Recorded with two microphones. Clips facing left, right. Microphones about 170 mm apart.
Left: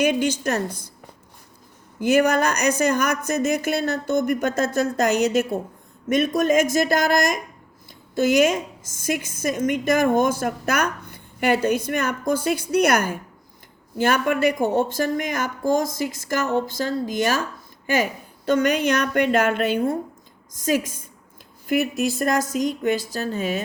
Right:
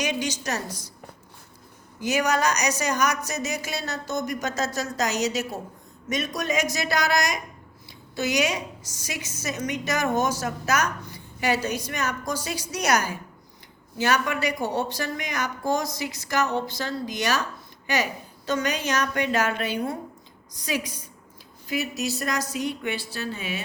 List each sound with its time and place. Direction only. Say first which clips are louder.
0.0 s speech: left 7 dB; 55° left (ahead or behind)
2.0 s a woman's voice: left 6 dB; 55° left (ahead or behind)